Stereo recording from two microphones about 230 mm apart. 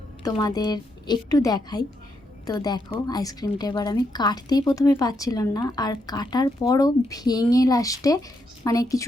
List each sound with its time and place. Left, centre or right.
0.3 s speech: centre